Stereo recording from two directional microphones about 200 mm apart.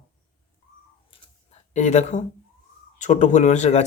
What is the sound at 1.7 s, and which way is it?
A man's voice, 35° left (ahead or behind).